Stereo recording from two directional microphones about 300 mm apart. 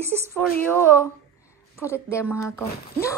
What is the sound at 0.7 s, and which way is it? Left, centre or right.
Speech, centre.